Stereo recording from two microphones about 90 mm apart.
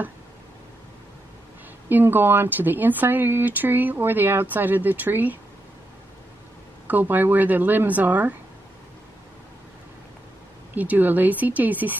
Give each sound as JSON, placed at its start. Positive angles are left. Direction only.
{"t": 1.9, "sound": "speech", "side_deg": -20}
{"t": 6.9, "sound": "speech", "side_deg": -20}
{"t": 10.7, "sound": "speech", "side_deg": -20}